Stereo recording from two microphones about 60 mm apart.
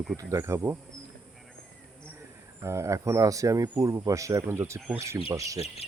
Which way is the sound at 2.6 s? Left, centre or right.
Right.